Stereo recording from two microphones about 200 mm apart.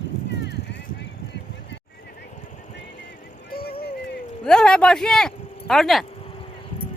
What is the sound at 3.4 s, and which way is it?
Vehicle, 50° left (ahead or behind).